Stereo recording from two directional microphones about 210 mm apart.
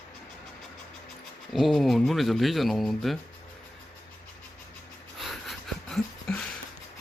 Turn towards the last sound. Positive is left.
turn(degrees=5)  # may be behind; listen again after turning